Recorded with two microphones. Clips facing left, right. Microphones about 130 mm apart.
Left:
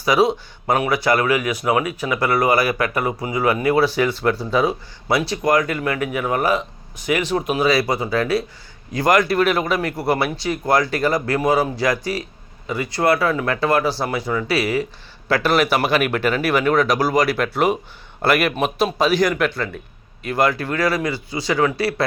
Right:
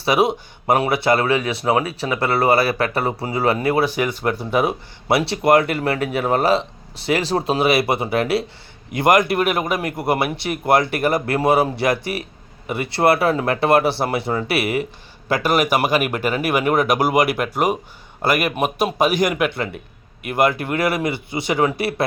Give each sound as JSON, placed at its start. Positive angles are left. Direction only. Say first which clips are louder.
{"t": 0.1, "sound": "speech", "louder": "left 1 dB", "side_deg": -25}
{"t": 3.8, "sound": "speech", "louder": "left 2 dB", "side_deg": -20}
{"t": 15.3, "sound": "speech", "louder": "even", "side_deg": -15}